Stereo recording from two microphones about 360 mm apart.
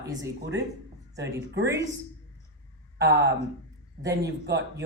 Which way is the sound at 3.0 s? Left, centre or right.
Right.